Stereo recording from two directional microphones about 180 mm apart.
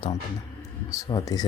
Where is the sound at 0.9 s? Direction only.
20° left (ahead or behind).